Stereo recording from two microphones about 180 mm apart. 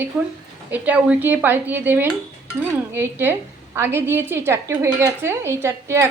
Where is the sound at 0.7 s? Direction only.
10° right (ahead or behind).